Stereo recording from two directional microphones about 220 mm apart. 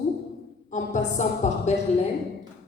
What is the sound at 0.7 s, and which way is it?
A woman's voice, 35° left (ahead or behind).